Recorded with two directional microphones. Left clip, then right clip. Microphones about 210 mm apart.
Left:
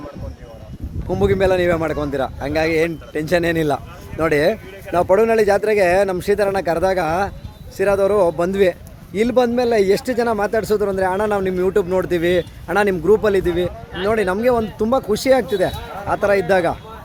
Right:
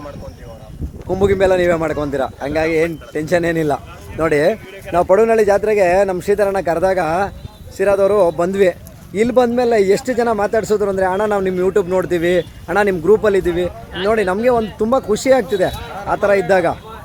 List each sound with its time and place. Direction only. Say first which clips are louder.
1.0 s a man's voice: right 3 dB; centre (ahead or behind)
5.5 s a man's voice: right 2 dB; 15° left (ahead or behind); by 16.7 s centre (ahead or behind)